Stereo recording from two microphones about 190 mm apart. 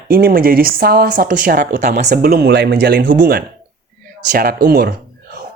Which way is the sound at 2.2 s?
60° right (ahead or behind).